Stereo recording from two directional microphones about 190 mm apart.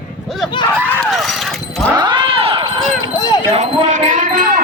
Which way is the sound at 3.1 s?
20° left (ahead or behind).